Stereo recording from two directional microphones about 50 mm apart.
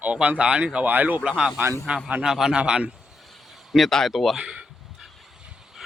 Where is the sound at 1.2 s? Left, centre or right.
Centre.